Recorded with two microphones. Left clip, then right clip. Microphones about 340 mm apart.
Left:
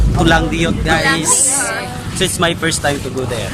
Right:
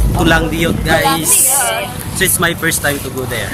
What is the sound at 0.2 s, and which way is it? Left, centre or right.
Music, centre.